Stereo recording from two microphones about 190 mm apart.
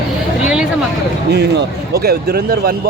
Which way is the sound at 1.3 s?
60° right (ahead or behind).